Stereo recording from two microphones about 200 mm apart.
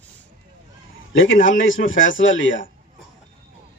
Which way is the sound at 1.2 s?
40° left (ahead or behind).